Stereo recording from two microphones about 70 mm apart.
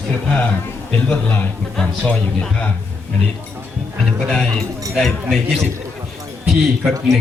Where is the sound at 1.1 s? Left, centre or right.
Left.